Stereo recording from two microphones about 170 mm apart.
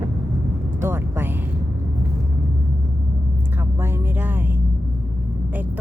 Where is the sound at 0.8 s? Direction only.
15° right (ahead or behind).